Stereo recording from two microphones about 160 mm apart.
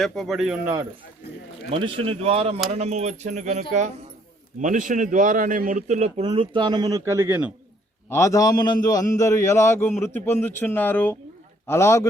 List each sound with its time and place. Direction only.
0.0 s speech: centre (ahead or behind)
1.7 s speech: 35° right (ahead or behind); by 7.5 s 10° right (ahead or behind)
8.1 s a man's voice: 20° left (ahead or behind)